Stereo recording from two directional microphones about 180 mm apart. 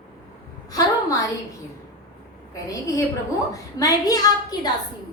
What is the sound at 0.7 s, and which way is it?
Speech, 20° left (ahead or behind).